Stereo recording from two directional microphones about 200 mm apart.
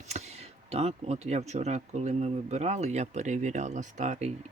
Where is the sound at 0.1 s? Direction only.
35° right (ahead or behind).